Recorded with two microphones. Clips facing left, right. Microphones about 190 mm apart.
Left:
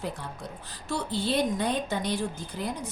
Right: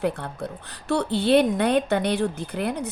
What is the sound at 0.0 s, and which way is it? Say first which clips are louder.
A woman's voice: right 9 dB; 60° right (ahead or behind).